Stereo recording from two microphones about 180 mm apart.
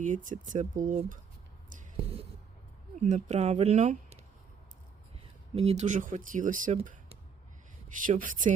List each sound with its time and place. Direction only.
0.0 s speech: 45° right (ahead or behind)
3.0 s speech: 40° right (ahead or behind)
5.5 s speech: 35° right (ahead or behind)
7.9 s speech: 45° right (ahead or behind)